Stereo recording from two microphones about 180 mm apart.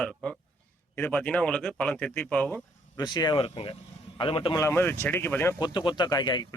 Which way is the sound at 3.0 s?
25° left (ahead or behind).